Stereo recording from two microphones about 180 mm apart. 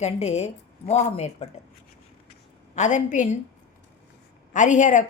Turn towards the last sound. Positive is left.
turn(degrees=45)  # may be behind; listen again after turning